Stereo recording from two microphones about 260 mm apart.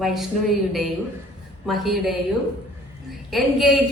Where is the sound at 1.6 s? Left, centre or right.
Centre.